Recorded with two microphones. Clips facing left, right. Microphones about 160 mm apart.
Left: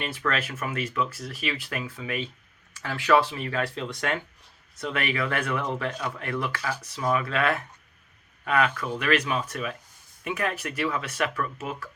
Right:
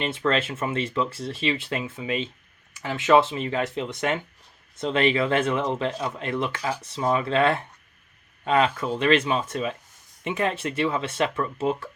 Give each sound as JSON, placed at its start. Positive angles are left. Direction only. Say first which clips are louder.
{"t": 0.0, "sound": "speech", "louder": "right 5 dB", "side_deg": -25}